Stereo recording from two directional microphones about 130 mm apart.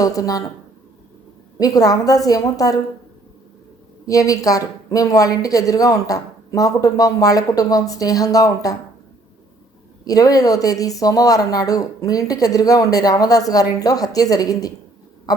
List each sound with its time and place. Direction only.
0.0 s speech: 25° left (ahead or behind)
1.5 s speech: 25° left (ahead or behind)
4.0 s speech: 25° left (ahead or behind)
10.0 s speech: 30° left (ahead or behind)